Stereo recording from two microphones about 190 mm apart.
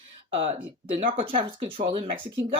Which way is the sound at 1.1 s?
25° right (ahead or behind).